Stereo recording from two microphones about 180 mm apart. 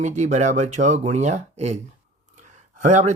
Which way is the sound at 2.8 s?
40° right (ahead or behind).